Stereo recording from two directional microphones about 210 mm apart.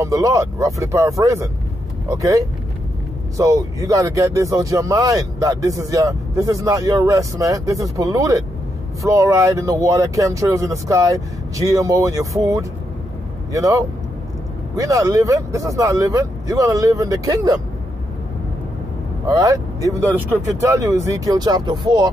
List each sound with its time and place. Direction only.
0.0 s speech: 15° right (ahead or behind)
19.2 s speech: 15° right (ahead or behind)